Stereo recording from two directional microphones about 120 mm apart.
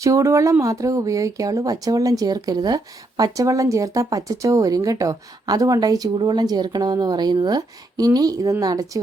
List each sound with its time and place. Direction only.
0.0 s speech: 25° right (ahead or behind)